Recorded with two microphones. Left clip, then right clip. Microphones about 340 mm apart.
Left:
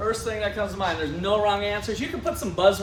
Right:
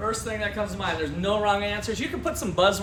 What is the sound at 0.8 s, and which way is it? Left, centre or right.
Speech, centre.